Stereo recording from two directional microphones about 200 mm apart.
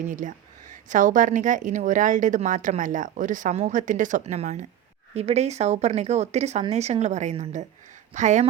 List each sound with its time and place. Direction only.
0.1 s a woman's voice: 40° right (ahead or behind)